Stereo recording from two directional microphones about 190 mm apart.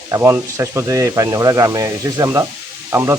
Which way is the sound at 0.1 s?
15° right (ahead or behind).